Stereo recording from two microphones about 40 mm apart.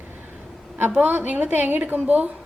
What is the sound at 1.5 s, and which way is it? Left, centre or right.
Speech, right.